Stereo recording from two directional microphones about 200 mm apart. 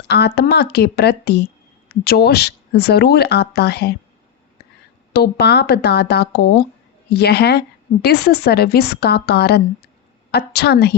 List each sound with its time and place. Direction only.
0.1 s speech: 55° left (ahead or behind)
5.1 s speech: 55° left (ahead or behind)